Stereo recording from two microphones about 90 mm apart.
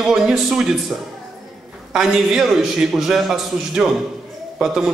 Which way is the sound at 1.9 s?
5° right (ahead or behind).